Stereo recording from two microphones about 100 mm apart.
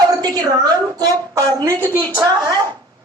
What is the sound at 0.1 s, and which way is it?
A woman's voice, 40° right (ahead or behind).